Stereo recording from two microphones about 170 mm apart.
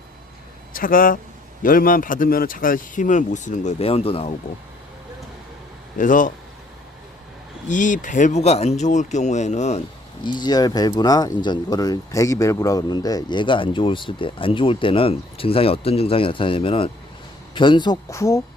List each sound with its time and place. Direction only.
0.7 s speech: 55° left (ahead or behind); by 4.4 s 35° left (ahead or behind)
6.0 s speech: 50° left (ahead or behind)
7.7 s speech: 50° left (ahead or behind)
10.2 s speech: 25° left (ahead or behind)